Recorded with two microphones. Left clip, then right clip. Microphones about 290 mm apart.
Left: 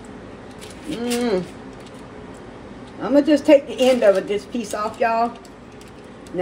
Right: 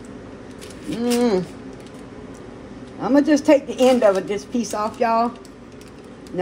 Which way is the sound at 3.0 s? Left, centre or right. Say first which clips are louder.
Left 1 dB; right.